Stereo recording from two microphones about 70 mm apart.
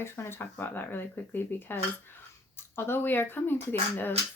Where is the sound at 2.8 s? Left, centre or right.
Left.